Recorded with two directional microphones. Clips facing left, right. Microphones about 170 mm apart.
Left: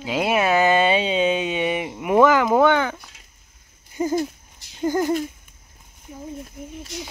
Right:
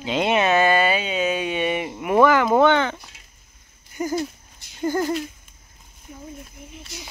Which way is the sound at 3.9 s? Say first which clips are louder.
Left 3 dB; 25° left (ahead or behind).